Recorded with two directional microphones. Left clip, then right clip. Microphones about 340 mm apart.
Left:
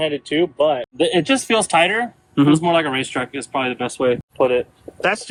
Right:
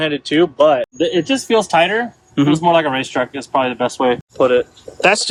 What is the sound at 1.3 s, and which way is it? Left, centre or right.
Speech, centre.